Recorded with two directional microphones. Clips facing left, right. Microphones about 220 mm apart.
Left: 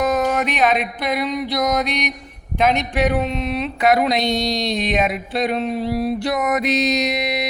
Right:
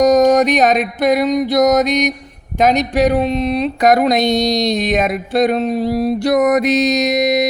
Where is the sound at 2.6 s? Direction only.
40° right (ahead or behind).